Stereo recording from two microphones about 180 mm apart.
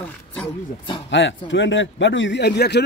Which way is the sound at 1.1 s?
90° left.